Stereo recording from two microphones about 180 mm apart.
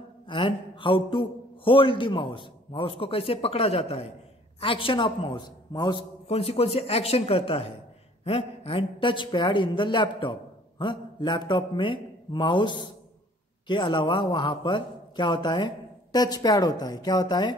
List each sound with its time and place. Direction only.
0.3 s a man's voice: 30° left (ahead or behind)